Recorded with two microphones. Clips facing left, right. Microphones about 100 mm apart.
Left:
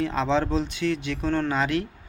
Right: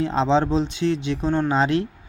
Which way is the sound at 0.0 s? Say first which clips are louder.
Right 4 dB; 25° right (ahead or behind).